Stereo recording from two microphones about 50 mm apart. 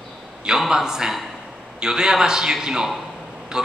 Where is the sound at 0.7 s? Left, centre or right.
Centre.